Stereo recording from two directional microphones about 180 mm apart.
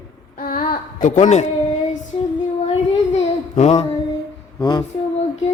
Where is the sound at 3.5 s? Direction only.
35° left (ahead or behind).